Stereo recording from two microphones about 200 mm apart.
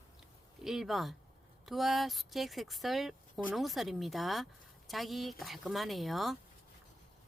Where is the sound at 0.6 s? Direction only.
Centre (ahead or behind).